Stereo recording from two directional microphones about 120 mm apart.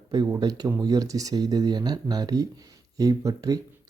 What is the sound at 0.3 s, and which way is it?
Speech, 35° right (ahead or behind).